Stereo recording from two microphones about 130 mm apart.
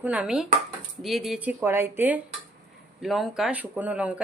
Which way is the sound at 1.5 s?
15° right (ahead or behind).